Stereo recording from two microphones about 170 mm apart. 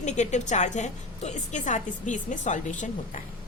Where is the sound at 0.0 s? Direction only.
45° left (ahead or behind).